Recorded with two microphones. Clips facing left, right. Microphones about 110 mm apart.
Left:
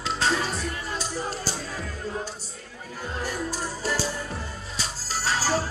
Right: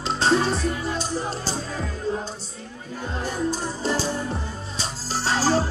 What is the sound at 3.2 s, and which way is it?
Music, 25° right (ahead or behind).